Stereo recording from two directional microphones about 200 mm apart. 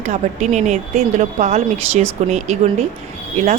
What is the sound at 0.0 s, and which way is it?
Speech, 35° right (ahead or behind).